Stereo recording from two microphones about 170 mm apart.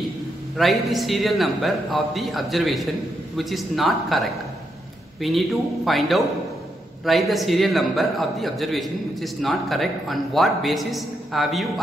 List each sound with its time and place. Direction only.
0.6 s a man's voice: centre (ahead or behind)